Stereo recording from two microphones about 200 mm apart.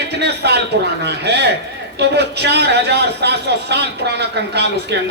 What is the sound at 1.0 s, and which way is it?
A man's voice, 55° right (ahead or behind).